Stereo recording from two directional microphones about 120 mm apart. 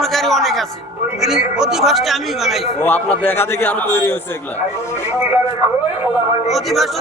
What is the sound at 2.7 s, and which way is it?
A man's voice, 15° left (ahead or behind).